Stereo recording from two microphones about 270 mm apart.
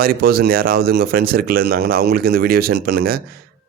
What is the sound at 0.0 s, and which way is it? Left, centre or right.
Speech, right.